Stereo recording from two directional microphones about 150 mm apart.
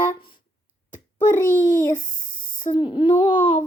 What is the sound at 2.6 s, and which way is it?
Child singing, 30° left (ahead or behind).